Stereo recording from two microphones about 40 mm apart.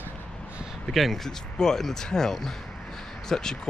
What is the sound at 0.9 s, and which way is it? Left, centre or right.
Speech, centre.